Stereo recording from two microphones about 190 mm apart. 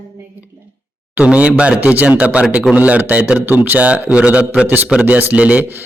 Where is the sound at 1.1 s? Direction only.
5° right (ahead or behind).